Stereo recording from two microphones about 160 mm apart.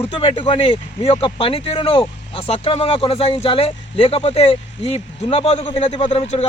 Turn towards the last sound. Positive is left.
turn(degrees=40)  # may be behind; listen again after turning